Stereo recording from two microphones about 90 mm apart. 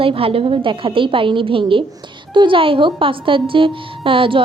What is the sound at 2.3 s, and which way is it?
A woman's voice, 65° right (ahead or behind).